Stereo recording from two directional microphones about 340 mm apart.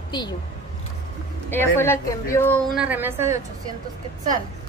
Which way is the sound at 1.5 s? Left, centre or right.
Centre.